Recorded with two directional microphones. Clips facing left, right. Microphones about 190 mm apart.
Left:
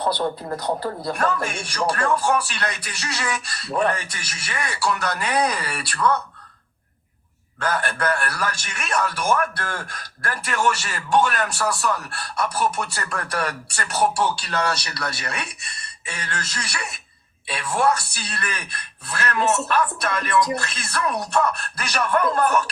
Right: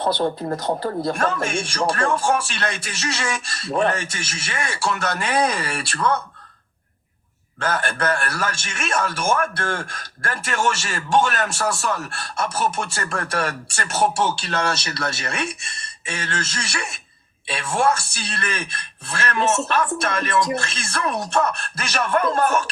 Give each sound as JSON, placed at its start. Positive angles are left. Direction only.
{"t": 0.0, "sound": "speech", "side_deg": -25}
{"t": 7.6, "sound": "speech", "side_deg": -25}